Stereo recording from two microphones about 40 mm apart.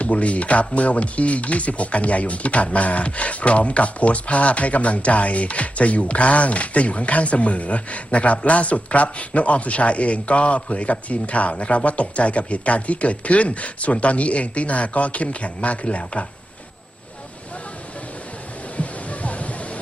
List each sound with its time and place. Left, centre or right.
0.0 s speech: left
18.8 s music: left